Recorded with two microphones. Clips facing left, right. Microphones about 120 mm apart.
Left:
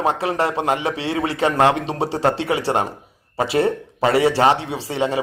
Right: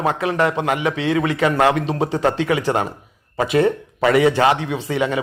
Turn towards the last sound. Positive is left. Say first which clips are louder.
# right 1 dB
turn(degrees=30)  # may be behind; listen again after turning